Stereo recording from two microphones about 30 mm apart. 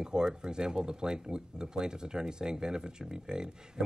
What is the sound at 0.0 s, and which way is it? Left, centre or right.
Speech, right.